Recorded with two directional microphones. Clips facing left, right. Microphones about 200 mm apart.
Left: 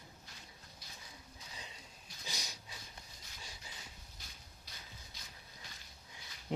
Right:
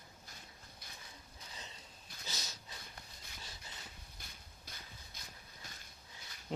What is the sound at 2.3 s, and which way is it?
Dog, 10° left (ahead or behind).